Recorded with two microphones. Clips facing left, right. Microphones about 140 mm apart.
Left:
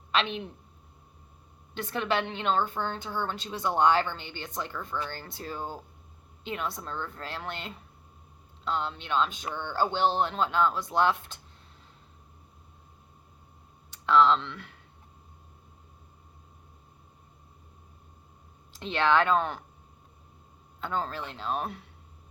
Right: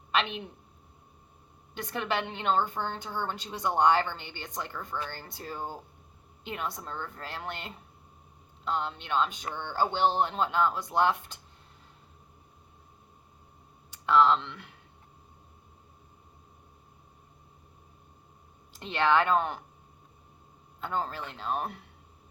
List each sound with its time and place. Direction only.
0.1 s a woman's voice: 15° right (ahead or behind)
1.8 s speech: 15° right (ahead or behind)
13.9 s speech: 10° right (ahead or behind)
18.8 s speech: 10° right (ahead or behind)
20.8 s speech: 15° right (ahead or behind)